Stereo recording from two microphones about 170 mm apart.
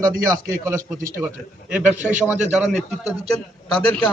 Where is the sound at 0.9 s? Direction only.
55° right (ahead or behind).